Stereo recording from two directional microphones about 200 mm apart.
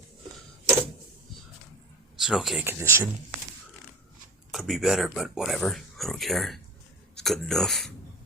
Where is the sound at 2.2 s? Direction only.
Centre (ahead or behind).